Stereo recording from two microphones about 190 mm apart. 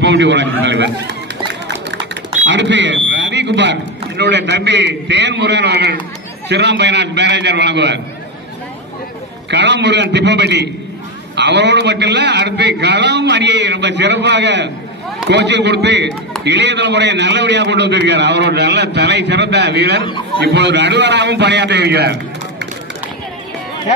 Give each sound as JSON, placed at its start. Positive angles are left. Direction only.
{"t": 0.0, "sound": "a man's voice", "side_deg": -70}
{"t": 2.4, "sound": "a man's voice", "side_deg": -70}
{"t": 9.5, "sound": "a man's voice", "side_deg": -65}